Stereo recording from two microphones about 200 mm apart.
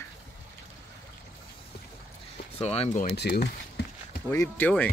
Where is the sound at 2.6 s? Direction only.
30° left (ahead or behind).